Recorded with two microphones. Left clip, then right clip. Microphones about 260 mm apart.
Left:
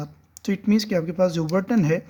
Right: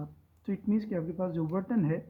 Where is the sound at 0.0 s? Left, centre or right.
Left.